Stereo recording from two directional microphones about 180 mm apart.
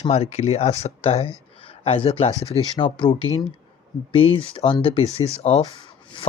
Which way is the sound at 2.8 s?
25° left (ahead or behind).